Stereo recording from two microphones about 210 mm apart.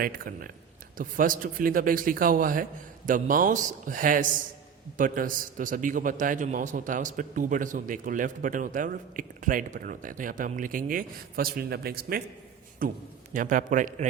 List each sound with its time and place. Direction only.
0.0 s a man's voice: 45° right (ahead or behind)